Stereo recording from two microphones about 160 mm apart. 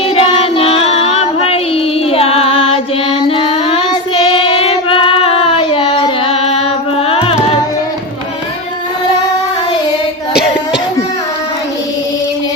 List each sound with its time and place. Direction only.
0.2 s child singing: 35° left (ahead or behind)